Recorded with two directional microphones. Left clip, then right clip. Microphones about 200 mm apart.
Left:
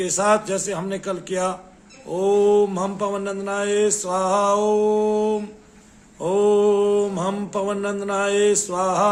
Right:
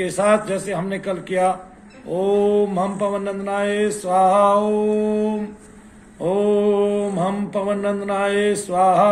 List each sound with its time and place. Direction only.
0.0 s mantra: 25° left (ahead or behind)